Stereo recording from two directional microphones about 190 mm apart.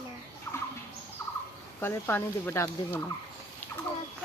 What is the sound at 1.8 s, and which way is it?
Speech, 10° left (ahead or behind).